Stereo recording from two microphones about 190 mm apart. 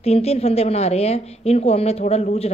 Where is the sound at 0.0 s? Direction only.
35° left (ahead or behind).